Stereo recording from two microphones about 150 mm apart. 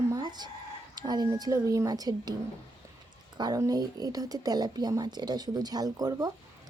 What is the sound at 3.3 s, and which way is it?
Speech, 25° right (ahead or behind).